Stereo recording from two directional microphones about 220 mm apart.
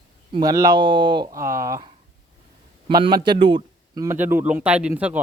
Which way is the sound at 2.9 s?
20° right (ahead or behind).